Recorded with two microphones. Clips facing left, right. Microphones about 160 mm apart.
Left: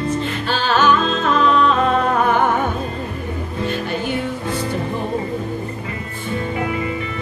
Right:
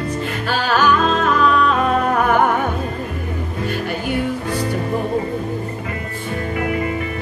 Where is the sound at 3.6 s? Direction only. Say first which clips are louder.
Left 1 dB; 25° left (ahead or behind).